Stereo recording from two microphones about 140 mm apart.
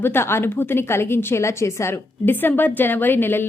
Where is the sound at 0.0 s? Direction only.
15° left (ahead or behind).